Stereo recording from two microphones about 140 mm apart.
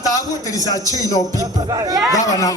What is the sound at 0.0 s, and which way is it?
A man's voice, 25° left (ahead or behind).